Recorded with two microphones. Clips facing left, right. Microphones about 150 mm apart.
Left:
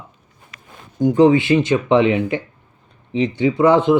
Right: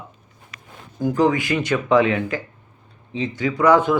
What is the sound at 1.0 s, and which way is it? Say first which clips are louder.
Speech: left 6 dB; 25° left (ahead or behind).